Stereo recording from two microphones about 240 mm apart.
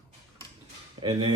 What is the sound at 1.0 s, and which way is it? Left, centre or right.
Speech, right.